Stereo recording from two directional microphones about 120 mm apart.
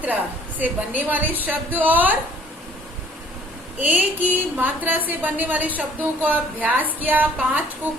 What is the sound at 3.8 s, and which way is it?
A woman's voice, 15° right (ahead or behind).